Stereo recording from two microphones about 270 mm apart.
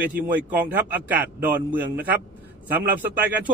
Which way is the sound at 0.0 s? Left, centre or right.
Right.